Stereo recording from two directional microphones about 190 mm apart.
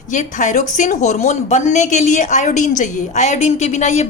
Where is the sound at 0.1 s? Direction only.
40° left (ahead or behind).